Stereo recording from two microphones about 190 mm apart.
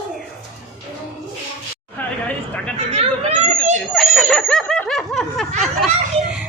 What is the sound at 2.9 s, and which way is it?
Speech, 35° right (ahead or behind).